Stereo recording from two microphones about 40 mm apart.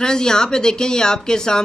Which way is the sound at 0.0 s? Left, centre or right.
Centre.